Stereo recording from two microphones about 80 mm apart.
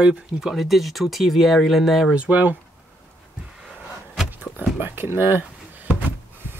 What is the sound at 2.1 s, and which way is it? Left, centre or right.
Speech, centre.